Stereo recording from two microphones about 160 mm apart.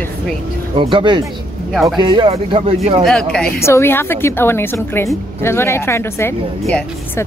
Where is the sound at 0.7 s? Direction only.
30° right (ahead or behind).